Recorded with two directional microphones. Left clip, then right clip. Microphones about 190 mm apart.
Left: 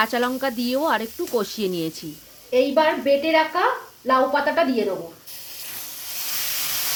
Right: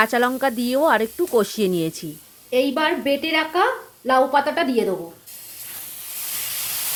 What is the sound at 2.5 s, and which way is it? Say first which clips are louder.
A woman's voice: left 1 dB; 55° right (ahead or behind).